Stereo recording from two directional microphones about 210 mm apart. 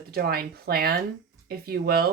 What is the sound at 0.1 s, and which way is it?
Speech, 45° right (ahead or behind).